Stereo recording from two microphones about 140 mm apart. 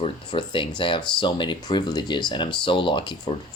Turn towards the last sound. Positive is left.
turn(degrees=35)  # may be behind; listen again after turning